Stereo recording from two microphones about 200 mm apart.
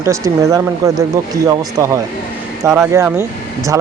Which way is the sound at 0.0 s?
15° right (ahead or behind).